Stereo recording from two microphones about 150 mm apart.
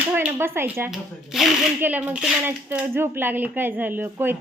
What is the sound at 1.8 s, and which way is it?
Speech, 10° right (ahead or behind).